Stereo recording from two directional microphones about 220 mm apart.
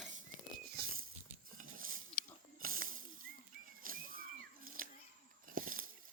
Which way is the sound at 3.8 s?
40° right (ahead or behind).